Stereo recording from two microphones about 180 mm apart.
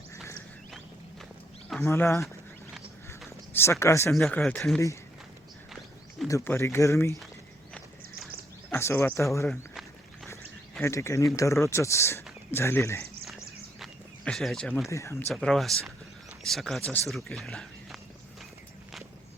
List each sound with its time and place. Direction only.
1.8 s speech: 15° left (ahead or behind)
3.5 s speech: 15° left (ahead or behind)
4.1 s speech: centre (ahead or behind)
6.2 s speech: 15° left (ahead or behind)
8.7 s speech: 15° left (ahead or behind)
10.8 s speech: 15° left (ahead or behind)
13.2 s a sound: centre (ahead or behind)
14.8 s speech: 15° left (ahead or behind)
15.3 s speech: 5° left (ahead or behind)